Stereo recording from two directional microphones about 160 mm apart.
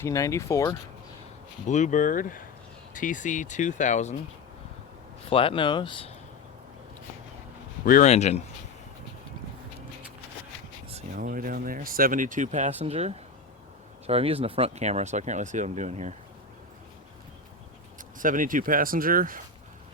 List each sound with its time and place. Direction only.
0.0 s speech: 20° left (ahead or behind)
1.6 s speech: 50° left (ahead or behind)
5.3 s speech: 35° left (ahead or behind)
7.9 s speech: 60° left (ahead or behind)
8.1 s speech: 45° left (ahead or behind)
11.1 s speech: 60° right (ahead or behind); by 16.1 s 45° right (ahead or behind)
18.2 s speech: 55° right (ahead or behind)